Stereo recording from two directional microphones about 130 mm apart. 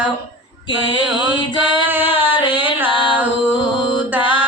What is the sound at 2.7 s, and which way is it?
Female singing, 15° right (ahead or behind).